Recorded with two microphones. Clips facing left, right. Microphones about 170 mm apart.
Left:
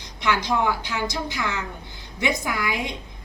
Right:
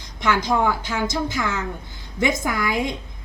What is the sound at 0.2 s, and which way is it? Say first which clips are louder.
A woman's voice: right 3 dB; 45° right (ahead or behind).